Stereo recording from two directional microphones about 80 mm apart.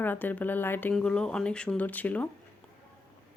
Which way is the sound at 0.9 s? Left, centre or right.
Centre.